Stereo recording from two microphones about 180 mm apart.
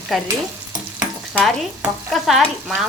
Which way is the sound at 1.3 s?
5° right (ahead or behind).